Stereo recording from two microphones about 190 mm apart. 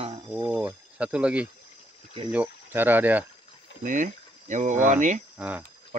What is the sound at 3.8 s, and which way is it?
Speech, 40° right (ahead or behind).